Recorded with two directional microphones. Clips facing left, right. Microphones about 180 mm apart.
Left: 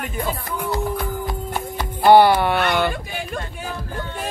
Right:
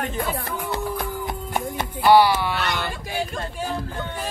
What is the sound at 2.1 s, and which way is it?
Speech, 55° left (ahead or behind).